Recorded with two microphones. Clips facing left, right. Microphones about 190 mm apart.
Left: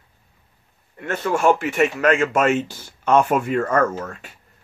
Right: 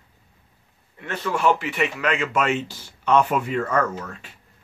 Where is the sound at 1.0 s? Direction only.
50° left (ahead or behind).